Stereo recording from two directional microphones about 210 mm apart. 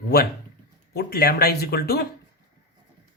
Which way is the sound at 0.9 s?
50° left (ahead or behind).